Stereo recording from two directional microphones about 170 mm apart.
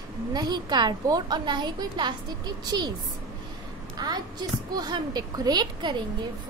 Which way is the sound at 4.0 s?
25° right (ahead or behind).